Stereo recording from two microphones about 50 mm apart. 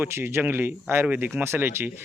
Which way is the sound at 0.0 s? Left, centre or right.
Right.